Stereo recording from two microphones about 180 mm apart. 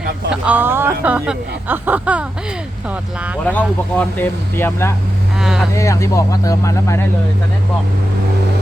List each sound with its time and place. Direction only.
0.3 s speech: 10° right (ahead or behind)
3.4 s speech: 10° left (ahead or behind)
5.4 s speech: 5° right (ahead or behind)
5.7 s speech: 15° left (ahead or behind)